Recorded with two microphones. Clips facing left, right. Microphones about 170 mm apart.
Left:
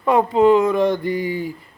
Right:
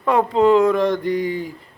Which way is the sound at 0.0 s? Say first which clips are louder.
Left 1 dB; 5° left (ahead or behind).